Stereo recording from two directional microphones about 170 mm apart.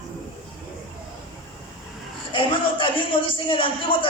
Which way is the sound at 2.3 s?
30° left (ahead or behind).